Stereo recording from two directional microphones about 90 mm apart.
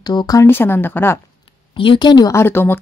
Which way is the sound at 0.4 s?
25° left (ahead or behind).